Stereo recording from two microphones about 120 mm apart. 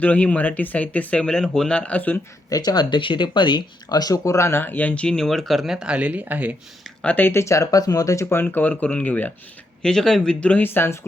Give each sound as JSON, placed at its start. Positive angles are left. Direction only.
{"t": 0.0, "sound": "speech", "side_deg": 10}
{"t": 2.5, "sound": "speech", "side_deg": 35}
{"t": 7.0, "sound": "speech", "side_deg": 15}